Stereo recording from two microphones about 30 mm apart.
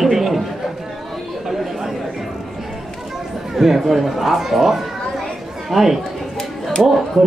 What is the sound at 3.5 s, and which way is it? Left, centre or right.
Chatter, centre.